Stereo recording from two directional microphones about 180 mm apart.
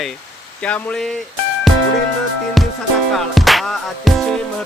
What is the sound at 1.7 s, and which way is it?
Music, centre (ahead or behind).